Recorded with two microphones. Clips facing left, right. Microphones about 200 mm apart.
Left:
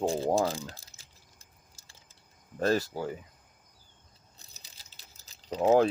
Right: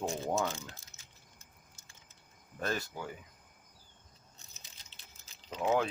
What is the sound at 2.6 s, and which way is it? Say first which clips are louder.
Speech: left 9 dB; 35° left (ahead or behind).